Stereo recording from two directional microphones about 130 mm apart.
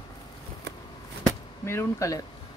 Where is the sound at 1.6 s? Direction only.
20° left (ahead or behind).